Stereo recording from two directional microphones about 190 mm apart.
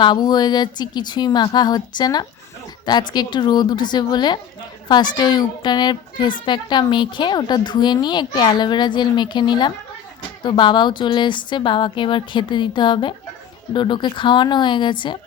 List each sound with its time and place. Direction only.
0.0 s a woman's voice: 20° left (ahead or behind)